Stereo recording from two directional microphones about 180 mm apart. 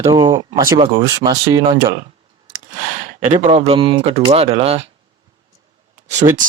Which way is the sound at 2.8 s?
45° right (ahead or behind).